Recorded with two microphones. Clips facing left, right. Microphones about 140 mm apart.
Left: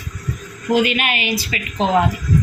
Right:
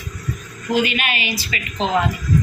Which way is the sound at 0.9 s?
50° left (ahead or behind).